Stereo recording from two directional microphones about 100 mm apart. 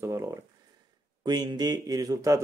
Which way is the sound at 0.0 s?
30° right (ahead or behind).